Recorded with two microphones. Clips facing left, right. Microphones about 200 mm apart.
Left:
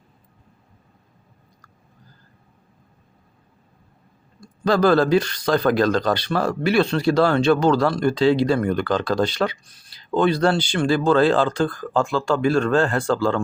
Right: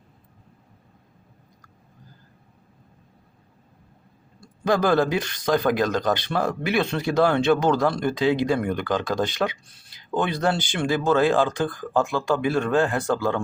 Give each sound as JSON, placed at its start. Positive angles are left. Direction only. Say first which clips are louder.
{"t": 4.4, "sound": "speech", "louder": "left 3 dB", "side_deg": -20}